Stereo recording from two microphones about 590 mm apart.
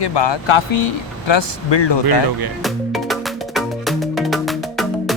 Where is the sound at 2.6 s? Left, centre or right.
Centre.